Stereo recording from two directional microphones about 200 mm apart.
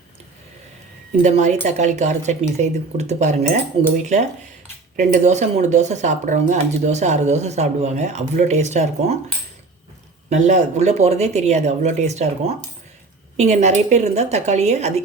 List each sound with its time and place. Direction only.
1.2 s speech: 35° right (ahead or behind)
10.2 s speech: 35° right (ahead or behind)